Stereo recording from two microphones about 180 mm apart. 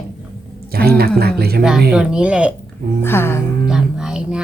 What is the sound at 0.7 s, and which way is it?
Speech, 60° right (ahead or behind).